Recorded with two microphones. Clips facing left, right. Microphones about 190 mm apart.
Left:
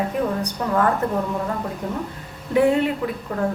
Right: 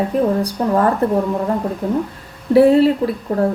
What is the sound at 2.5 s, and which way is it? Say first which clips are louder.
Speech: right 7 dB; 35° right (ahead or behind).